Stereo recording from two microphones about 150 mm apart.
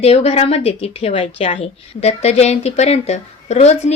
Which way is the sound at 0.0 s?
45° left (ahead or behind).